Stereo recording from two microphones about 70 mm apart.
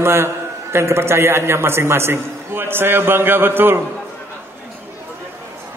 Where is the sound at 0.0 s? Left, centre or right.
Right.